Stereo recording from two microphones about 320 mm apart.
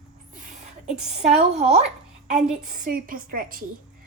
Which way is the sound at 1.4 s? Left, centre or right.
Right.